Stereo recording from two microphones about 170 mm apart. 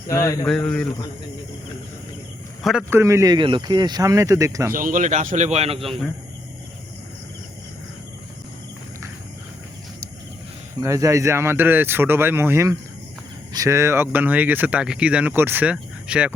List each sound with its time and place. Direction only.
0.1 s speech: 20° left (ahead or behind)
0.4 s a man's voice: 5° left (ahead or behind)
2.9 s speech: 15° right (ahead or behind)
4.7 s a man's voice: 50° right (ahead or behind)
10.8 s speech: 15° right (ahead or behind)